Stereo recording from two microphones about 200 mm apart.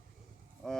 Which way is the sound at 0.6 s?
Centre (ahead or behind).